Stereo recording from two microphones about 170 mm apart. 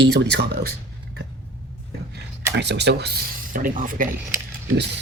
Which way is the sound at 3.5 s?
55° right (ahead or behind).